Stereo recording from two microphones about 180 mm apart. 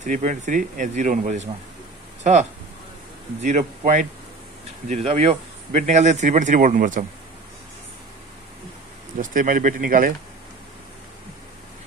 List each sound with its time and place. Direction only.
0.0 s speech: 45° right (ahead or behind)
3.4 s speech: 40° right (ahead or behind)
9.2 s speech: 45° right (ahead or behind)